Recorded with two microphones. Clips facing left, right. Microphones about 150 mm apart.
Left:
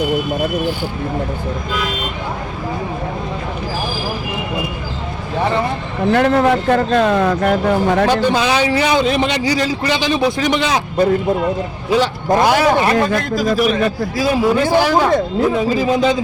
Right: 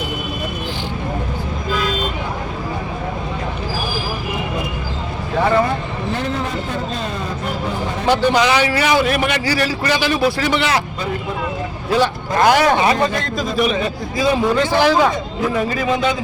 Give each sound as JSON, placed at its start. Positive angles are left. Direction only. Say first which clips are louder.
{"t": 6.1, "sound": "speech", "louder": "left 11 dB", "side_deg": 70}
{"t": 8.1, "sound": "a man's voice", "louder": "left 1 dB", "side_deg": -15}
{"t": 8.4, "sound": "a man's voice", "louder": "left 1 dB", "side_deg": 15}
{"t": 11.9, "sound": "a man's voice", "louder": "left 3 dB", "side_deg": 15}
{"t": 15.8, "sound": "a man's voice", "louder": "left 4 dB", "side_deg": 35}